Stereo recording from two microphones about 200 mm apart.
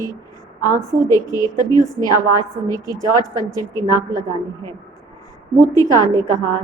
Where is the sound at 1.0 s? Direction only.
20° left (ahead or behind).